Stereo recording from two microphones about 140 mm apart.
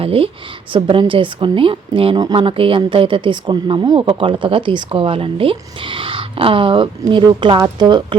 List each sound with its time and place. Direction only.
0.0 s speech: 45° right (ahead or behind)